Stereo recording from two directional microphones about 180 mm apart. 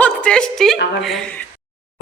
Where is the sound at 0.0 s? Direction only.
5° left (ahead or behind).